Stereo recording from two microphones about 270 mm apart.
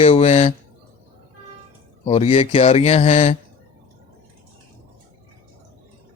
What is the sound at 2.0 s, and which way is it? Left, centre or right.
Speech, left.